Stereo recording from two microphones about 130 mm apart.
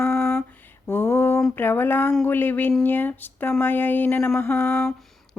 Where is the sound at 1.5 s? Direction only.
15° left (ahead or behind).